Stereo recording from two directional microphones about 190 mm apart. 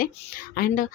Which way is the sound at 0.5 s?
45° left (ahead or behind).